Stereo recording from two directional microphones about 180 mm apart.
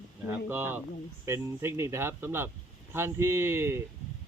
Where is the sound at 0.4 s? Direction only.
10° right (ahead or behind).